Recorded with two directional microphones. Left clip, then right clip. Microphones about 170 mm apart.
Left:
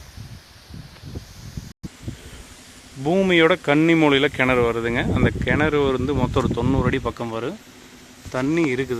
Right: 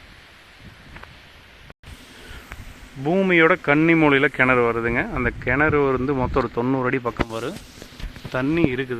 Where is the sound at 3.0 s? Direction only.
15° left (ahead or behind).